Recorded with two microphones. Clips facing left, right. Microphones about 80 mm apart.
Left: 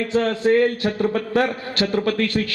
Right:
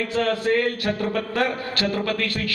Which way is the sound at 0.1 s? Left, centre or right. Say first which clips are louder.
Left 5 dB; left.